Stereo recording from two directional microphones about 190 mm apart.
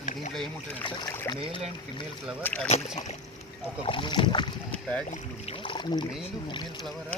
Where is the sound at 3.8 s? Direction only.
25° left (ahead or behind).